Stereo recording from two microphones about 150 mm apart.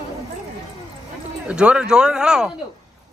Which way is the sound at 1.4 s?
5° right (ahead or behind).